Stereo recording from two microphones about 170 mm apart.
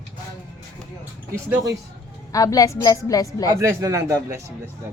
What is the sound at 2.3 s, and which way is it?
A child's voice, 20° left (ahead or behind).